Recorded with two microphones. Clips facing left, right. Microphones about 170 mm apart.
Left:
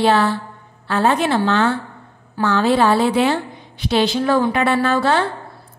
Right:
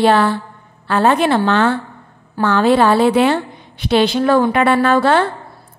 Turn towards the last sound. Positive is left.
turn(degrees=-55)  # may be behind; listen again after turning